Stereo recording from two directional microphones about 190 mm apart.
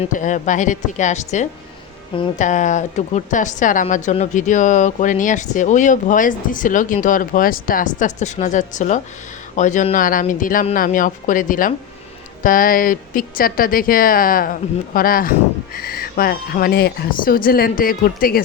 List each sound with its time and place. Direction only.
0.0 s a woman's voice: 40° left (ahead or behind)